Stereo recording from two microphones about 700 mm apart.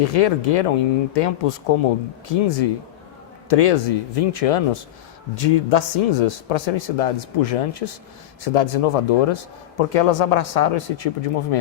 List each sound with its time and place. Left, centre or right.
0.0 s speech: left